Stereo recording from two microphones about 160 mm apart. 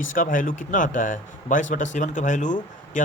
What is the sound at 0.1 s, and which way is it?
Speech, 55° left (ahead or behind).